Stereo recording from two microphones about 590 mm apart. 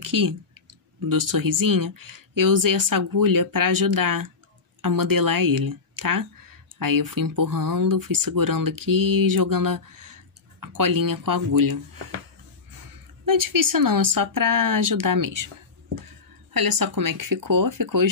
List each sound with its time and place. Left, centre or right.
0.0 s a sound: right
1.0 s speech: right
13.2 s speech: right
16.5 s speech: right